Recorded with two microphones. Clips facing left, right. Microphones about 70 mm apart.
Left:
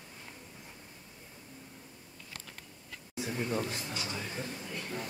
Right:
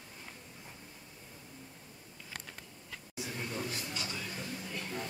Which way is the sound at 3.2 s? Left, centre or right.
Left.